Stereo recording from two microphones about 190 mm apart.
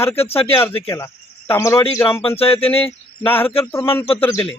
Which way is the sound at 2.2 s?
30° left (ahead or behind).